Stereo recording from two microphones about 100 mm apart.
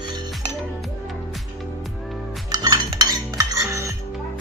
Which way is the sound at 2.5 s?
40° right (ahead or behind).